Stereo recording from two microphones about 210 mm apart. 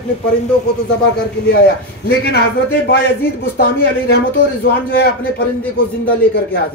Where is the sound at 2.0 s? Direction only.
50° left (ahead or behind).